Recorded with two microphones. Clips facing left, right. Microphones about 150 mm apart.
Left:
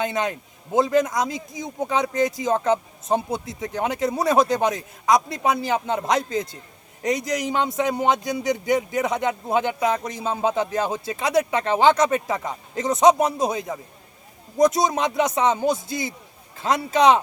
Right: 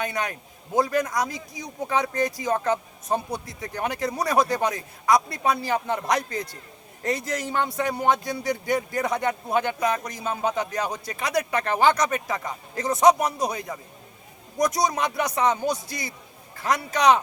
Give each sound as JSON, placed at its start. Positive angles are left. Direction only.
{"t": 0.0, "sound": "a man's voice", "side_deg": 20}